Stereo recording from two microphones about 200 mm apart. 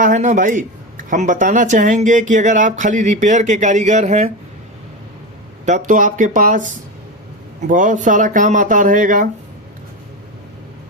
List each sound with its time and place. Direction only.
0.0 s speech: 40° right (ahead or behind)
5.6 s speech: 40° right (ahead or behind)
7.7 s speech: 40° right (ahead or behind)